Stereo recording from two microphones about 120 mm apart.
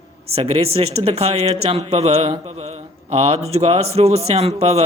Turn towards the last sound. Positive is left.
turn(degrees=-60)  # may be behind; listen again after turning